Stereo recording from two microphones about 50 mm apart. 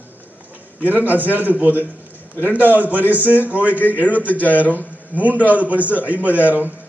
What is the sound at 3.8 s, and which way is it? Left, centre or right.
Speech, left.